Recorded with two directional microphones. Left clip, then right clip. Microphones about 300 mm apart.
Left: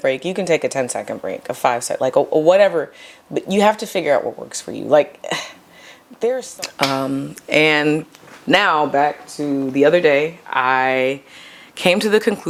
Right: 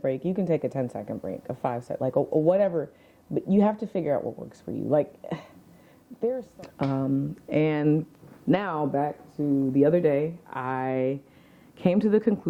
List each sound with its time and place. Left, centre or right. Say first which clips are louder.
0.0 s speech: left 9 dB; centre
2.2 s speech: left 8 dB; left
2.5 s speech: left 10 dB; centre